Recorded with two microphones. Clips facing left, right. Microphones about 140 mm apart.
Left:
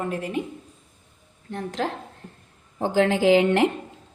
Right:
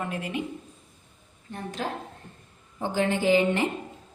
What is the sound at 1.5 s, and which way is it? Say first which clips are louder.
A woman's voice: left 4 dB; 90° left.